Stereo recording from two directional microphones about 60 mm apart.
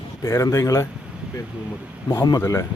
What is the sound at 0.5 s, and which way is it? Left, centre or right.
Speech, left.